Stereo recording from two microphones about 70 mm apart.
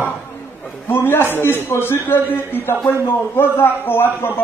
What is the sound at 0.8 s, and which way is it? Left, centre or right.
A man's voice, left.